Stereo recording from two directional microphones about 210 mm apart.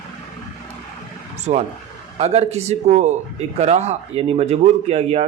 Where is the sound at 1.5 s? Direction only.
30° right (ahead or behind).